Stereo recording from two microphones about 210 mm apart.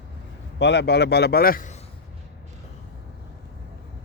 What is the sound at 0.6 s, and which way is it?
A man's voice, 55° left (ahead or behind).